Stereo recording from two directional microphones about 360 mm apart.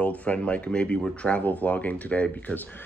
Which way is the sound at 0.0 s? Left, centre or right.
Centre.